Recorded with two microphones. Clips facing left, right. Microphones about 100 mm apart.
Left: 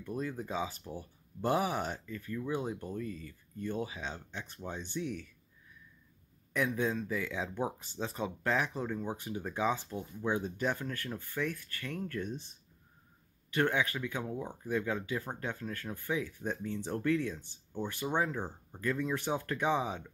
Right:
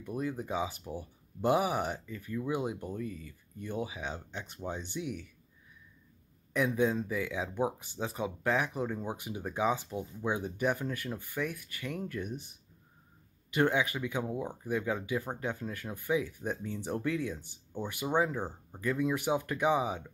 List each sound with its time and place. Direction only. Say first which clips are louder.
0.0 s speech: right 2 dB; 15° right (ahead or behind)
6.5 s speech: right 3 dB; 15° right (ahead or behind)